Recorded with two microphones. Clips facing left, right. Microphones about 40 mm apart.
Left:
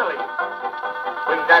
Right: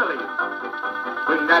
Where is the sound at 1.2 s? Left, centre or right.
Left.